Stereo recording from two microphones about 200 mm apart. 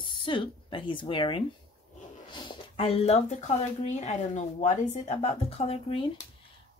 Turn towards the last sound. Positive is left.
turn(degrees=30)  # may be behind; listen again after turning